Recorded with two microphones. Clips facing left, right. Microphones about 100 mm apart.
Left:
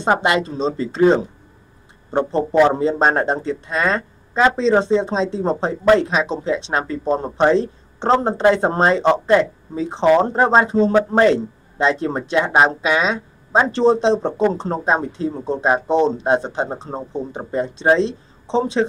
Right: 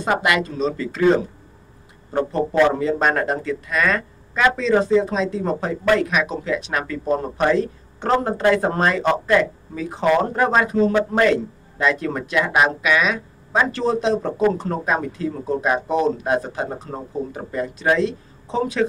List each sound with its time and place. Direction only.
0.0 s speech: 30° left (ahead or behind)